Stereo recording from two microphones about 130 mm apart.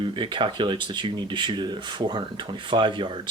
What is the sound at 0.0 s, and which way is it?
Speech, 40° right (ahead or behind).